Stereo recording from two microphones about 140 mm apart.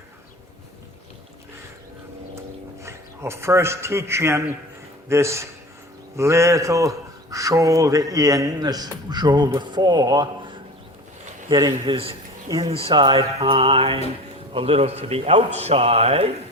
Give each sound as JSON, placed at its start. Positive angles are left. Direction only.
{"t": 2.8, "sound": "a man's voice", "side_deg": -20}